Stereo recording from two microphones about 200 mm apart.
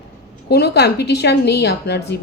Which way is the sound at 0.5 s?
55° left (ahead or behind).